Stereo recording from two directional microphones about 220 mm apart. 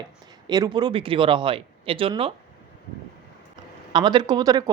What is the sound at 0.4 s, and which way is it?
Speech, 20° right (ahead or behind).